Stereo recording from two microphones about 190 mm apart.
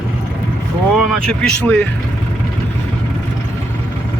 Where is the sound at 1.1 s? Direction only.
5° left (ahead or behind).